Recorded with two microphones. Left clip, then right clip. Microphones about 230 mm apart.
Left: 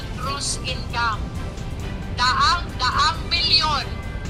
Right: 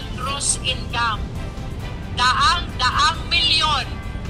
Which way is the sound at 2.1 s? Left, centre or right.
Centre.